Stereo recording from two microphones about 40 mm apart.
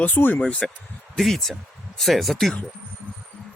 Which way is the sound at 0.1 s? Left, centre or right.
Left.